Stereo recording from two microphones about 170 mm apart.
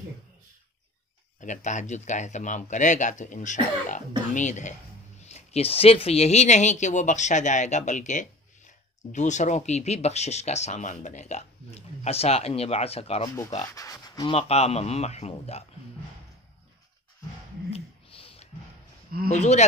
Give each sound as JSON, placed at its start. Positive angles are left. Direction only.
{"t": 1.4, "sound": "speech", "side_deg": 45}
{"t": 13.6, "sound": "speech", "side_deg": 20}
{"t": 14.3, "sound": "speech", "side_deg": 40}
{"t": 17.7, "sound": "a sound", "side_deg": 35}
{"t": 19.3, "sound": "speech", "side_deg": 40}